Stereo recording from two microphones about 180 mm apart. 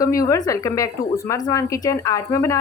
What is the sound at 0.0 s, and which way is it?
Speech, 15° left (ahead or behind).